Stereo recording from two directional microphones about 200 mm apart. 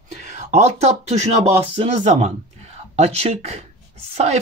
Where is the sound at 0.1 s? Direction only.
35° right (ahead or behind).